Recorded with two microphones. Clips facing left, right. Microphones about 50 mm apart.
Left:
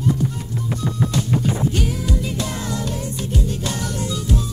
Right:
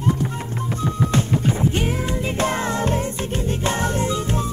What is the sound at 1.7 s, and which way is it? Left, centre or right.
Music, right.